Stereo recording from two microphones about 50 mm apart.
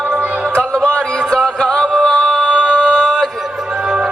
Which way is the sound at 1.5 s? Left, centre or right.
Centre.